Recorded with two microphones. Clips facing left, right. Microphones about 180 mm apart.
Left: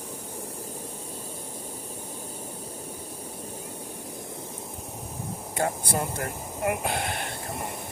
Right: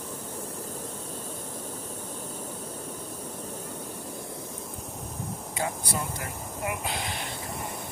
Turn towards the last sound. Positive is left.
turn(degrees=55)  # may be behind; listen again after turning